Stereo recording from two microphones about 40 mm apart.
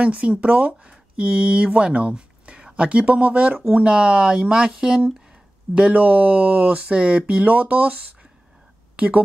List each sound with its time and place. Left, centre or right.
0.0 s speech: right
5.9 s speech: right
7.4 s speech: right